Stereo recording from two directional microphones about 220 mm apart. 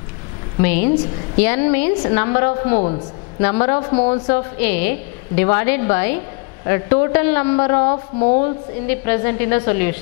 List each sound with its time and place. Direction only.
0.6 s a woman's voice: 10° left (ahead or behind)
7.9 s speech: 30° left (ahead or behind)
8.4 s a woman's voice: 10° left (ahead or behind)